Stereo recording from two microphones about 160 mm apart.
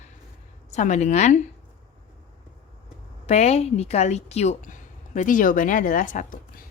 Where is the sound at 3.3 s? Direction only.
40° left (ahead or behind).